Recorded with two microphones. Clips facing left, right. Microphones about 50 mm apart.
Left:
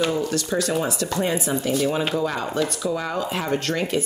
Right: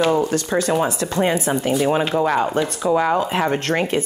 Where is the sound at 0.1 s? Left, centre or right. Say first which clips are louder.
Right 5 dB; right.